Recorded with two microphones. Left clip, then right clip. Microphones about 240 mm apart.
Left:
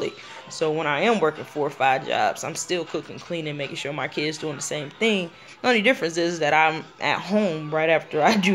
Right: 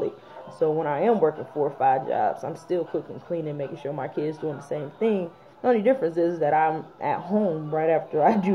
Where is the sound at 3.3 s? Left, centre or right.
Centre.